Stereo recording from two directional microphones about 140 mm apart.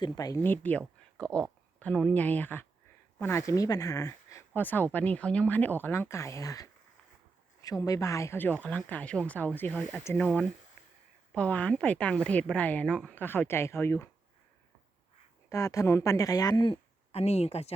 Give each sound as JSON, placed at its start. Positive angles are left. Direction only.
{"t": 0.0, "sound": "speech", "side_deg": 25}
{"t": 0.4, "sound": "a woman's voice", "side_deg": 15}
{"t": 10.8, "sound": "a sound", "side_deg": 0}
{"t": 11.3, "sound": "a woman's voice", "side_deg": 10}
{"t": 15.4, "sound": "speech", "side_deg": 25}